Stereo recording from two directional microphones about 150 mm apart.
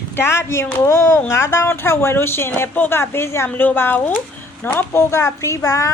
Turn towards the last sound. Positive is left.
turn(degrees=20)  # may be behind; listen again after turning